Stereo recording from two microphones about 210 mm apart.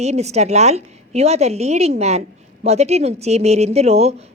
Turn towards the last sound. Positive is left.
turn(degrees=-30)  # may be behind; listen again after turning